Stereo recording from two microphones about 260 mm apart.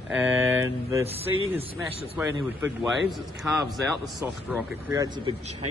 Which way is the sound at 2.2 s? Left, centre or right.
Centre.